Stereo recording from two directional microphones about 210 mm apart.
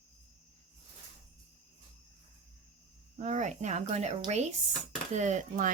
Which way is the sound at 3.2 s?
35° right (ahead or behind).